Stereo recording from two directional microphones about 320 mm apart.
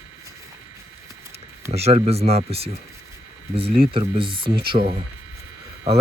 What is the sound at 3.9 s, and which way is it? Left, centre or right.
Speech, centre.